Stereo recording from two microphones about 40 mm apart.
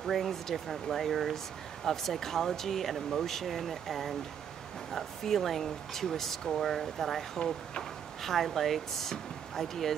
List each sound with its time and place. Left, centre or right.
0.0 s speech: centre
7.3 s speech: centre
8.2 s speech: centre